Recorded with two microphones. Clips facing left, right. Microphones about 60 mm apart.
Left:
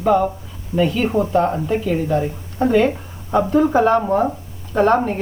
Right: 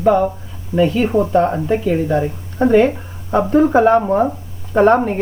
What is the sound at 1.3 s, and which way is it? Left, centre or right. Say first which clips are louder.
Speech: right 2 dB; right.